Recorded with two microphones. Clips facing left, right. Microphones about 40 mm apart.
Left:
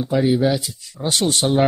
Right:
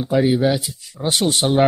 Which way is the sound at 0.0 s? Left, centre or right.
Centre.